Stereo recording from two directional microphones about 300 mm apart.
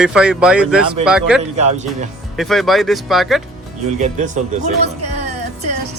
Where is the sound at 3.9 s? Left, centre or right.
Right.